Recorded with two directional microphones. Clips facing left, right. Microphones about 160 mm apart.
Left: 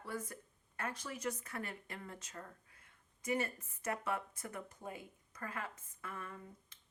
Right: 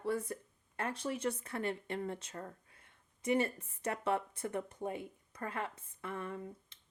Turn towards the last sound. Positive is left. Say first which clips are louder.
# right 8 dB
turn(degrees=-25)  # may be behind; listen again after turning